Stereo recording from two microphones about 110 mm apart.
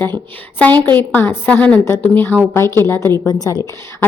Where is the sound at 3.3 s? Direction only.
35° left (ahead or behind).